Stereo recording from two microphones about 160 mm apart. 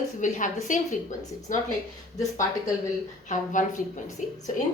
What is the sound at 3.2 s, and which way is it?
Speech, 50° left (ahead or behind).